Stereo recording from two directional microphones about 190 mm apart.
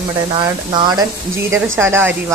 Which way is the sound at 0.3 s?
25° right (ahead or behind).